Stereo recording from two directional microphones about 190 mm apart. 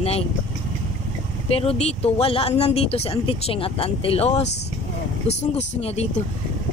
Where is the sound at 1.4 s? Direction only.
30° left (ahead or behind).